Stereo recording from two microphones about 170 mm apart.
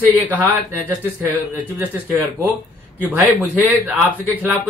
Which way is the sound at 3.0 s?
10° right (ahead or behind).